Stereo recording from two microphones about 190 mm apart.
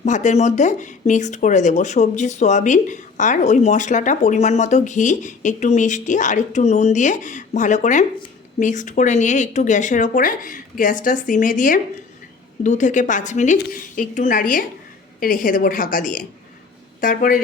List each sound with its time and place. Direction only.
0.0 s a woman's voice: 40° left (ahead or behind)